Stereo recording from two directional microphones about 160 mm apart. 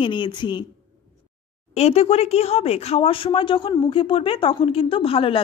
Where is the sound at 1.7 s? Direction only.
40° left (ahead or behind).